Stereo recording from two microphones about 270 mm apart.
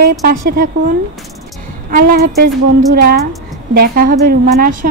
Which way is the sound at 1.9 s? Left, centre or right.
Right.